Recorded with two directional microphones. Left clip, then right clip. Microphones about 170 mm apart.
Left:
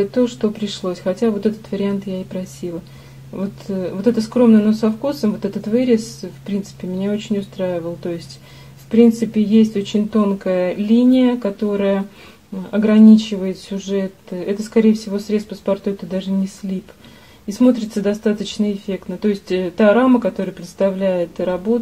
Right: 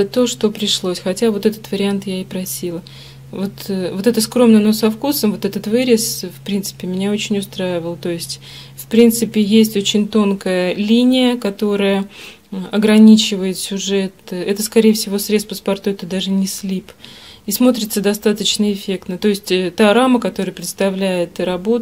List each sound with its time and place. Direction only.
0.0 s speech: 25° right (ahead or behind)